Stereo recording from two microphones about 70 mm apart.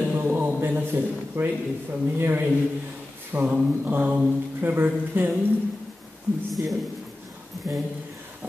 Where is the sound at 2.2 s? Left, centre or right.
Right.